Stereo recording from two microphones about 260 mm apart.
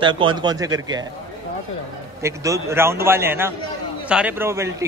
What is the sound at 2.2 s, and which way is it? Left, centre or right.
Speech, centre.